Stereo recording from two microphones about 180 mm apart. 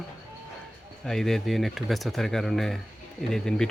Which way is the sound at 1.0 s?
Centre (ahead or behind).